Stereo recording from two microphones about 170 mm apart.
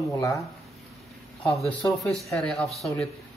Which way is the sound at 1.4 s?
10° left (ahead or behind).